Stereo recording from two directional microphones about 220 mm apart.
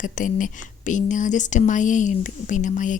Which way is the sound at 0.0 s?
35° left (ahead or behind).